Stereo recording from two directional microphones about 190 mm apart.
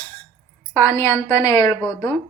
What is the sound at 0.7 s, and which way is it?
A woman's voice, 10° left (ahead or behind).